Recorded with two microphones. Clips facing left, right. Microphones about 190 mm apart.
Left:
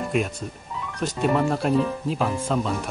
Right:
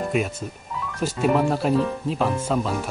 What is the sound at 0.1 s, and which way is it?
Speech, centre (ahead or behind).